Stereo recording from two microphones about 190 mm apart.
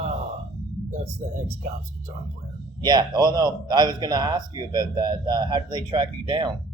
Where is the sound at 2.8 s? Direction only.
20° right (ahead or behind).